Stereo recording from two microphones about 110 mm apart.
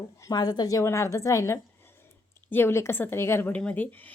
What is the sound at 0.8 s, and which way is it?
A woman's voice, 25° left (ahead or behind).